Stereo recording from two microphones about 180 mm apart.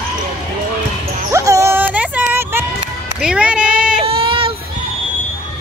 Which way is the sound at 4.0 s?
30° right (ahead or behind).